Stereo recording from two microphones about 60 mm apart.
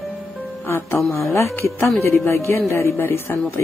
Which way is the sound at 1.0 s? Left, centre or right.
Left.